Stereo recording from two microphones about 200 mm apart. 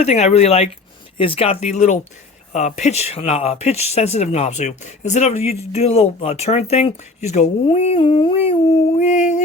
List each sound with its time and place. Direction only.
0.0 s speech: 35° left (ahead or behind)